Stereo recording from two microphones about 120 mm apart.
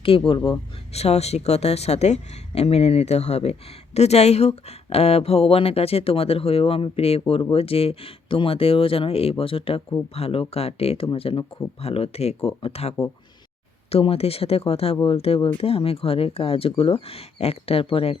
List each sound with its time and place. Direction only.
0.3 s speech: 45° left (ahead or behind)
0.9 s speech: 60° left (ahead or behind)
13.9 s speech: 55° left (ahead or behind)